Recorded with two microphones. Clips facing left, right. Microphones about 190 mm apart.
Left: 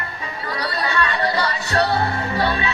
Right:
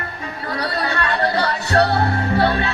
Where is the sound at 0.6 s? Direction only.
60° right (ahead or behind).